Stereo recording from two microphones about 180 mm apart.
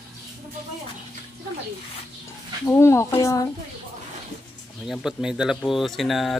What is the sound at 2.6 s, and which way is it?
Speech, 15° left (ahead or behind).